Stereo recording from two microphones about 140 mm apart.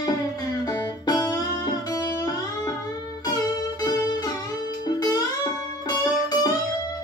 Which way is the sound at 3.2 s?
30° left (ahead or behind).